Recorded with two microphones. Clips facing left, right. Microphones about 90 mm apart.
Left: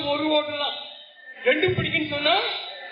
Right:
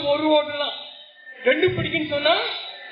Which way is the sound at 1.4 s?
30° right (ahead or behind).